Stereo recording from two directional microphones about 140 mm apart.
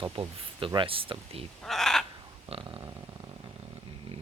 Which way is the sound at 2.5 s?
35° right (ahead or behind).